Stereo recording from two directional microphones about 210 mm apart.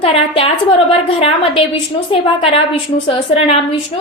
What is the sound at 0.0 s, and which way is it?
Speech, 30° left (ahead or behind).